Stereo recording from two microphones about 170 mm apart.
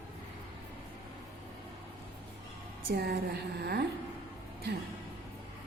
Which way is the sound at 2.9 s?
70° right (ahead or behind).